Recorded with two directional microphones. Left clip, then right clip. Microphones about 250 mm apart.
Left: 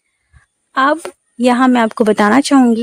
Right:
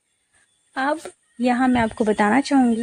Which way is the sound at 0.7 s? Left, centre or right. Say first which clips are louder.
Left 10 dB; left.